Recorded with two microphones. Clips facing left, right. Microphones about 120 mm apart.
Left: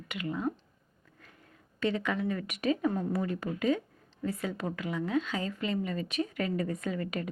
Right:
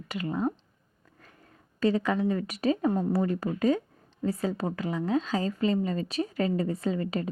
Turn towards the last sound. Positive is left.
turn(degrees=-30)  # may be behind; listen again after turning